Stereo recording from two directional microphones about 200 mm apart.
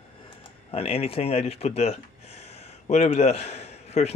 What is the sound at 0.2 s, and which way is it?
Speech, 25° left (ahead or behind).